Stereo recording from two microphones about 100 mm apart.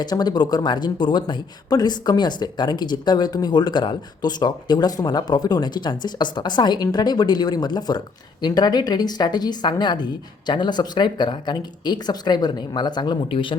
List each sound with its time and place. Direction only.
0.0 s speech: 45° left (ahead or behind)